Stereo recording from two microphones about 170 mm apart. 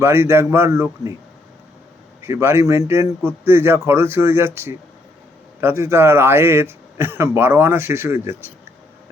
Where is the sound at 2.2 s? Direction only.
15° right (ahead or behind).